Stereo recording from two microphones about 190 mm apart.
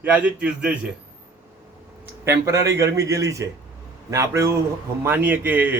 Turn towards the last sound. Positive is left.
turn(degrees=-10)  # may be behind; listen again after turning